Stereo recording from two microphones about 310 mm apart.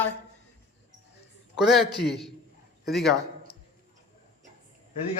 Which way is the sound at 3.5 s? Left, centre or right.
Left.